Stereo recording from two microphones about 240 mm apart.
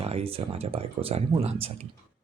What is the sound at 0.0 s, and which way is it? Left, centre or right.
Speech, right.